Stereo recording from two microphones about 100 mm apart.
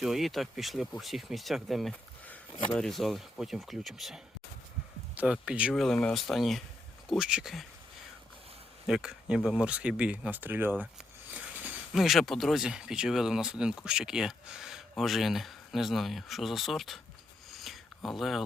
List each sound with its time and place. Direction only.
0.0 s speech: centre (ahead or behind)
1.9 s a sound: 15° left (ahead or behind)
2.7 s speech: 5° left (ahead or behind)
5.7 s speech: 5° left (ahead or behind)
8.9 s speech: 10° right (ahead or behind)
11.9 s speech: centre (ahead or behind)
17.5 s a sound: centre (ahead or behind)